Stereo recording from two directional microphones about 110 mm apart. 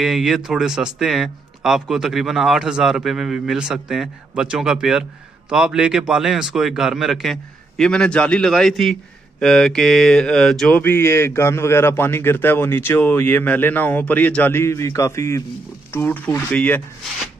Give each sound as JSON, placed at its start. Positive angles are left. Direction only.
{"t": 0.0, "sound": "speech", "side_deg": 0}
{"t": 10.8, "sound": "a man's voice", "side_deg": 20}